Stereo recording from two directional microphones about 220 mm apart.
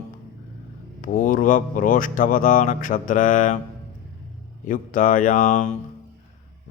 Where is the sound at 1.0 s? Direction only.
40° left (ahead or behind).